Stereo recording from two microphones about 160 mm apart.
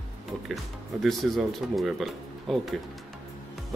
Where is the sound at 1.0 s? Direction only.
Centre (ahead or behind).